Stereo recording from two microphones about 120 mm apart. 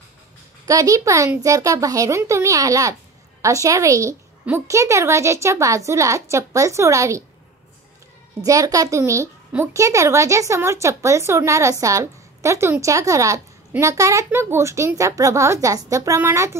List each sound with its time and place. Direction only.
0.7 s a woman's voice: 30° right (ahead or behind)
8.4 s a woman's voice: 30° right (ahead or behind)